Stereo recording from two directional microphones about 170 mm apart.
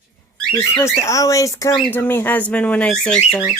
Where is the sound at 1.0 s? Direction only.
20° left (ahead or behind).